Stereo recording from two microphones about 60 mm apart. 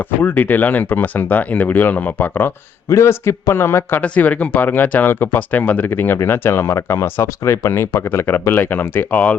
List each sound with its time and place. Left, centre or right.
0.2 s speech: left
2.9 s a man's voice: left
4.0 s speech: left